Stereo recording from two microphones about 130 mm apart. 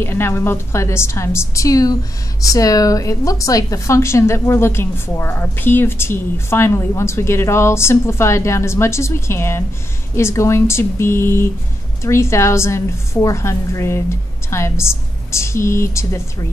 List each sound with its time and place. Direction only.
0.0 s a woman's voice: 15° left (ahead or behind)